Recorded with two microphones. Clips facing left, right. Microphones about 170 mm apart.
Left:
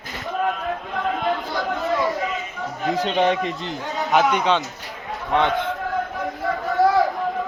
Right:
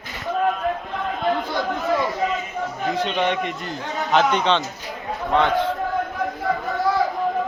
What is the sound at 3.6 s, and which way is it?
Speech, 20° left (ahead or behind).